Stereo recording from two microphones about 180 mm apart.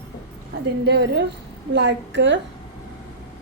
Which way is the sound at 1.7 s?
80° right.